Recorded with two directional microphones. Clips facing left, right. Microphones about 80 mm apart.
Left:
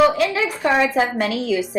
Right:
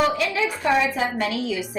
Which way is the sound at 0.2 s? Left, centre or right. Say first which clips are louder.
Left 4 dB; left.